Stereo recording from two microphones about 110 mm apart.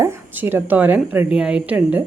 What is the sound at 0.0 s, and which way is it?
Speech, 25° right (ahead or behind).